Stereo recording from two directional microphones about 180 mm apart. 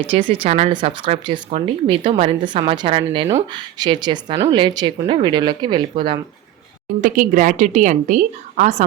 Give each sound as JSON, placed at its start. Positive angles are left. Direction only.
{"t": 0.1, "sound": "speech", "side_deg": -35}
{"t": 7.0, "sound": "a woman's voice", "side_deg": -50}